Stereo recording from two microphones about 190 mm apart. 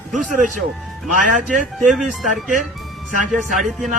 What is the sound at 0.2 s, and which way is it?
Speech, 45° right (ahead or behind).